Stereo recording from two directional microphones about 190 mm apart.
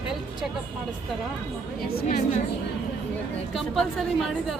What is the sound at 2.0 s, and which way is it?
Speech, 55° left (ahead or behind).